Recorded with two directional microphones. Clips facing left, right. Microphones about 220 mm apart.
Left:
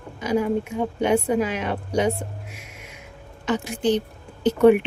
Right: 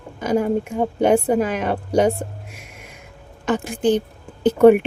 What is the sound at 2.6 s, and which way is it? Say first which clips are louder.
Music: right 1 dB; 50° right (ahead or behind).